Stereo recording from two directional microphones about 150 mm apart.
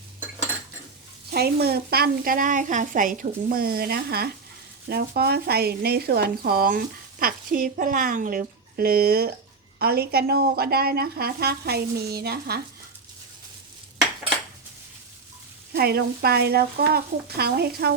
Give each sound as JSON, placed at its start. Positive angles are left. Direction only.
{"t": 1.3, "sound": "speech", "side_deg": -90}
{"t": 15.7, "sound": "speech", "side_deg": -90}